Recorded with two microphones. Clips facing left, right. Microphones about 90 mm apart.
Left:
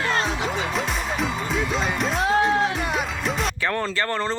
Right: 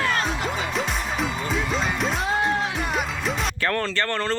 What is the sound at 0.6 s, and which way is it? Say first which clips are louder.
Music: left 1 dB; centre (ahead or behind).